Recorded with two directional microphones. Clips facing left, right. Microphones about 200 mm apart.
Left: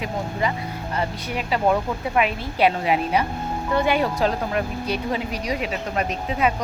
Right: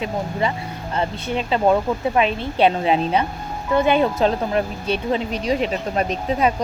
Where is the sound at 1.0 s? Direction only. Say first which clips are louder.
Right 5 dB; 25° right (ahead or behind).